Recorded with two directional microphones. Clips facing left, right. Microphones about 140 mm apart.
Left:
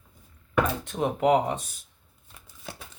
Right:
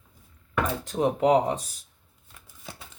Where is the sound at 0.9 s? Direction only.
35° right (ahead or behind).